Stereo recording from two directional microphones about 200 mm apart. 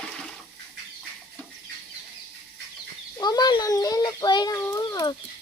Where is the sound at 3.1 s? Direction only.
20° left (ahead or behind).